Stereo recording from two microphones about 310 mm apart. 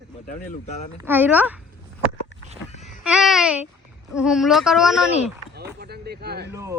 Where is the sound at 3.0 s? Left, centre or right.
Centre.